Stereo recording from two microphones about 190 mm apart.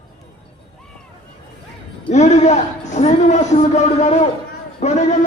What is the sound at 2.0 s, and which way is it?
A man's voice, 35° left (ahead or behind).